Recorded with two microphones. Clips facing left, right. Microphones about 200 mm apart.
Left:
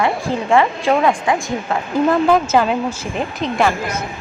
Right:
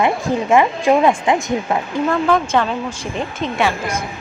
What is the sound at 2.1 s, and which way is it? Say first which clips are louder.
A woman's voice: left 2 dB; 5° left (ahead or behind).